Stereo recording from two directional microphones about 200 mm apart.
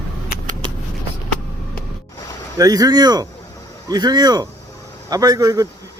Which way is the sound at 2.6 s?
20° right (ahead or behind).